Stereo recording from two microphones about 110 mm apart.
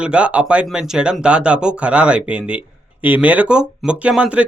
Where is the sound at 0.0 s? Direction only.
10° right (ahead or behind).